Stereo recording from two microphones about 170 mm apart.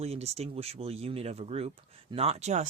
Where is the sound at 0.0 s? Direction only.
40° right (ahead or behind).